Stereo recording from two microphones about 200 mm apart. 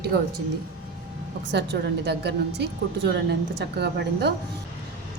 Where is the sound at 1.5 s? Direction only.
55° right (ahead or behind).